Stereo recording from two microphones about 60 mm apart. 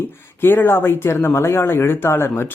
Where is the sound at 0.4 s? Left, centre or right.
Left.